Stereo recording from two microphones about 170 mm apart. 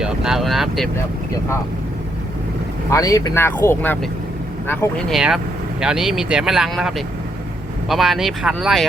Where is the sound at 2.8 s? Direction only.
20° left (ahead or behind).